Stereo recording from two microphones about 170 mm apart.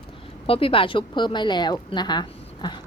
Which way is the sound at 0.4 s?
35° left (ahead or behind).